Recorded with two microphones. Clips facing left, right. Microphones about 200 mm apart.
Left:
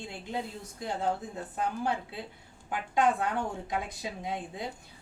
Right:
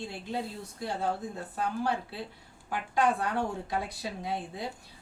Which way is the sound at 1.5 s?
20° left (ahead or behind).